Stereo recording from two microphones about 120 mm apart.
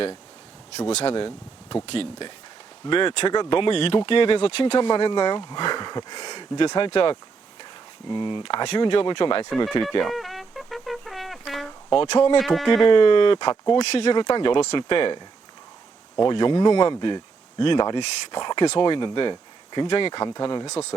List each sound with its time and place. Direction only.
0.9 s speech: 55° left (ahead or behind)
4.9 s speech: 45° left (ahead or behind)
6.7 s speech: 45° left (ahead or behind)
10.0 s music: centre (ahead or behind)
12.1 s speech: 45° left (ahead or behind)
12.4 s music: centre (ahead or behind)
12.9 s speech: 45° left (ahead or behind)
13.7 s speech: 55° left (ahead or behind)
16.3 s speech: 40° left (ahead or behind)